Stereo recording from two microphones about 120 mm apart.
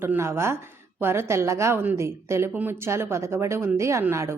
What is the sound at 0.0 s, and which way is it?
A woman's voice, 20° right (ahead or behind).